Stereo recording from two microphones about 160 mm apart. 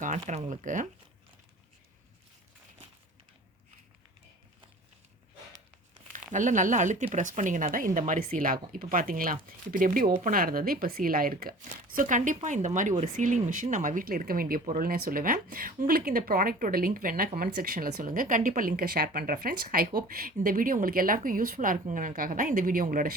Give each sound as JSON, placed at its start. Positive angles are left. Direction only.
{"t": 0.0, "sound": "speech", "side_deg": -50}
{"t": 6.1, "sound": "speech", "side_deg": -55}